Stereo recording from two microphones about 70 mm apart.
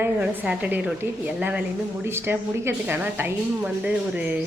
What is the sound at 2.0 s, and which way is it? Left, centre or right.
A woman's voice, right.